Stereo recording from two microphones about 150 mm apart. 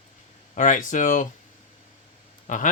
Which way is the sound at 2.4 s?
55° left (ahead or behind).